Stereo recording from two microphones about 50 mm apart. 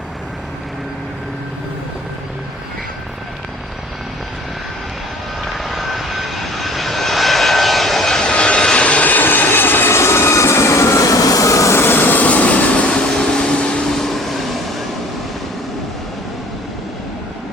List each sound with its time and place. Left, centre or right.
5.5 s vehicle: centre
8.2 s vehicle: left
11.8 s vehicle: left
12.9 s a sound: centre
13.9 s vehicle: centre